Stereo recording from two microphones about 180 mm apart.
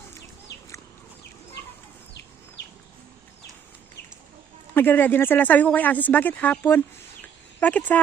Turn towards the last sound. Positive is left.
turn(degrees=10)  # may be behind; listen again after turning